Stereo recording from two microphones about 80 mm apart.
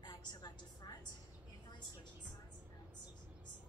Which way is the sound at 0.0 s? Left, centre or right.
Left.